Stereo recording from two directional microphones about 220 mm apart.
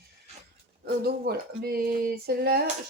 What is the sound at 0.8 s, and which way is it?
Speech, 45° right (ahead or behind).